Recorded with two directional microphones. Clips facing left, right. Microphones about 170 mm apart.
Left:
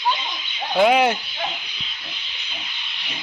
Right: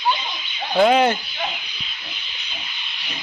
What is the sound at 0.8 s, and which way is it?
Speech, 10° left (ahead or behind).